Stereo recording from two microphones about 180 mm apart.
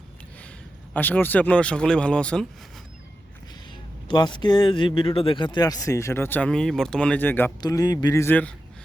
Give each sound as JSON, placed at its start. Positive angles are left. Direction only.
{"t": 0.9, "sound": "speech", "side_deg": 10}
{"t": 3.7, "sound": "speech", "side_deg": 25}